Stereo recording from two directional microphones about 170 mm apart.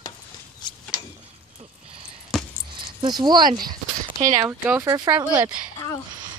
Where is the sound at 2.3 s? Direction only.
Centre (ahead or behind).